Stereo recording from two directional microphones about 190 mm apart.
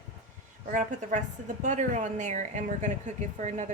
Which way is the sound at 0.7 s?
40° right (ahead or behind).